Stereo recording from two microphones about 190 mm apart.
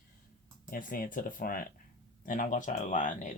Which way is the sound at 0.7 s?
45° left (ahead or behind).